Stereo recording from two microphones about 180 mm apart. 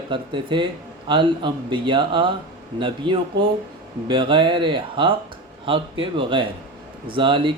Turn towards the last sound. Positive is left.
turn(degrees=-25)  # may be behind; listen again after turning